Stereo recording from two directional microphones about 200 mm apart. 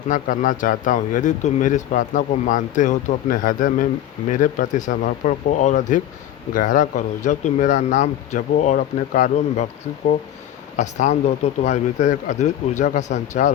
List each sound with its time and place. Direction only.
0.1 s speech: 40° left (ahead or behind)
10.8 s speech: 35° left (ahead or behind)